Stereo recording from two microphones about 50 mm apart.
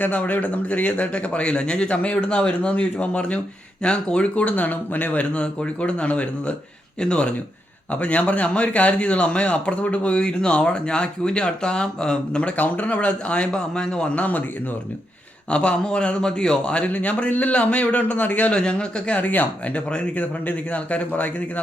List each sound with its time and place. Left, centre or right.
0.0 s a man's voice: left
13.5 s speech: centre
15.4 s a man's voice: left
18.5 s a man's voice: centre
19.2 s a man's voice: left